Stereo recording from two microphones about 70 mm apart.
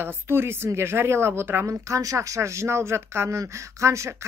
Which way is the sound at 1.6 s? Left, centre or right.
Right.